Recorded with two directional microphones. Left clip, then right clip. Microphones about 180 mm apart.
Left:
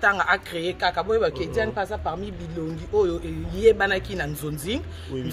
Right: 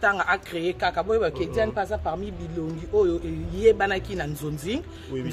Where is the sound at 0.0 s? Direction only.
25° right (ahead or behind).